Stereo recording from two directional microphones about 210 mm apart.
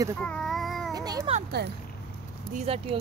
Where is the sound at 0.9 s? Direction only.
15° right (ahead or behind).